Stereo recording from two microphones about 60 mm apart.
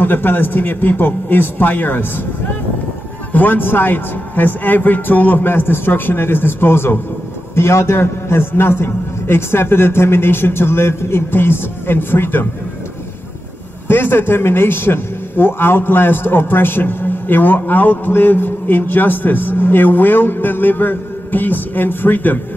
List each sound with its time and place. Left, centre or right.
0.0 s a man's voice: left
13.8 s a man's voice: left